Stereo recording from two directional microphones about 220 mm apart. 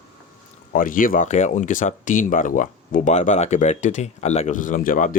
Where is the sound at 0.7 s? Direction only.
40° left (ahead or behind).